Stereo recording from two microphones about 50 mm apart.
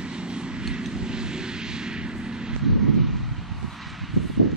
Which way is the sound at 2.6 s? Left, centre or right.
Centre.